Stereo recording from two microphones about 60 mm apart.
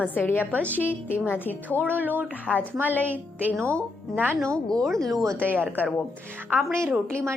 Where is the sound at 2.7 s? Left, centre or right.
Right.